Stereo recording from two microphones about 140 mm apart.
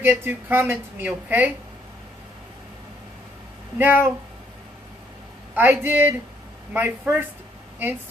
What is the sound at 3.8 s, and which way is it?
Speech, 15° right (ahead or behind).